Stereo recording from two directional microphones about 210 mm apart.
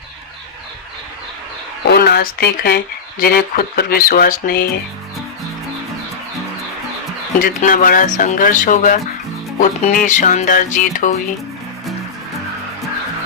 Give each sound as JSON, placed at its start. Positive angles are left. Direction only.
{"t": 1.9, "sound": "speech", "side_deg": 50}
{"t": 7.3, "sound": "music", "side_deg": 40}